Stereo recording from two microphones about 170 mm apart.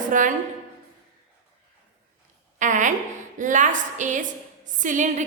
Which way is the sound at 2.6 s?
45° right (ahead or behind).